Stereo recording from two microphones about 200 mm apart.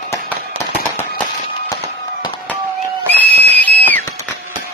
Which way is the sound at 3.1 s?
10° left (ahead or behind).